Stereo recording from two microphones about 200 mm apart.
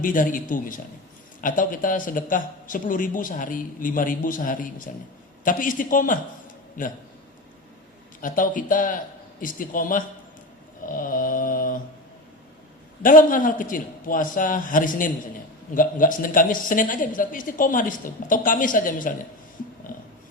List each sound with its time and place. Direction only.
0.0 s a woman's voice: 40° left (ahead or behind)
8.2 s a woman's voice: 40° left (ahead or behind)
10.8 s mantra: 45° left (ahead or behind)
13.0 s a woman's voice: 40° left (ahead or behind)